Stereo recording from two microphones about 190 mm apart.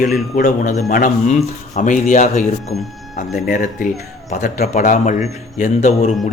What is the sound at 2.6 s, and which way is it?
Speech, centre (ahead or behind).